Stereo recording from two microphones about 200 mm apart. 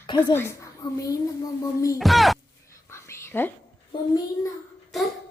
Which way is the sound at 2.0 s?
Centre (ahead or behind).